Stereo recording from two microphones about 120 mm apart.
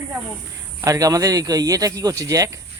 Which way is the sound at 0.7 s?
30° right (ahead or behind).